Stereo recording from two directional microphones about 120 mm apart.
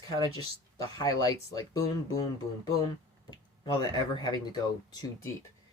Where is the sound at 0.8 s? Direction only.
35° left (ahead or behind).